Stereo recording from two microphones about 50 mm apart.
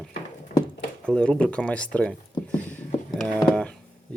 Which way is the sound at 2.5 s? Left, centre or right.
Left.